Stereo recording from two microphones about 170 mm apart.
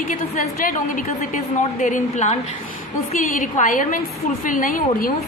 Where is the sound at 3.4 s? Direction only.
50° left (ahead or behind).